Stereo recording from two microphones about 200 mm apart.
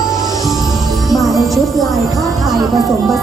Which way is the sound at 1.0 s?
Centre (ahead or behind).